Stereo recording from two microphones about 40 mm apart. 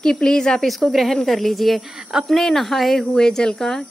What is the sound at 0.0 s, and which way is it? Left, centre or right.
Speech, left.